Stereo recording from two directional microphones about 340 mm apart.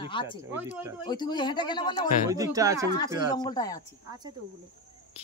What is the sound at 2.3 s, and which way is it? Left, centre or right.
Speech, centre.